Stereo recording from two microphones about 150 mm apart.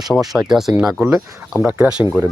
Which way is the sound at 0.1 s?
Centre (ahead or behind).